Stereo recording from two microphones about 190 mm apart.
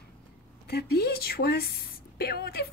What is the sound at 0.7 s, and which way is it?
Speech, 55° left (ahead or behind).